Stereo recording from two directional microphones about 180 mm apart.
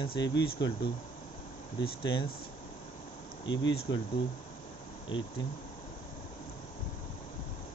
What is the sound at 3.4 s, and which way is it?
Speech, 90° left.